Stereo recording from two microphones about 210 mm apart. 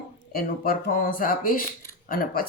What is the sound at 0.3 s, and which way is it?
Speech, 45° left (ahead or behind).